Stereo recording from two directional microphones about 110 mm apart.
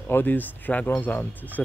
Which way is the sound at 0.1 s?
15° left (ahead or behind).